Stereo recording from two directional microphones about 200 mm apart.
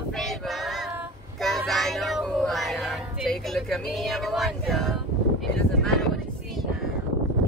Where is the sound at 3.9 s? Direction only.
Centre (ahead or behind).